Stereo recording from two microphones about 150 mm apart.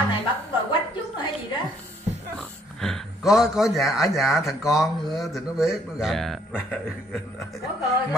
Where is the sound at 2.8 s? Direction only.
Centre (ahead or behind).